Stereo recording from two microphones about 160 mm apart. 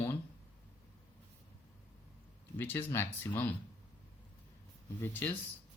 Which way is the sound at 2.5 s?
15° left (ahead or behind).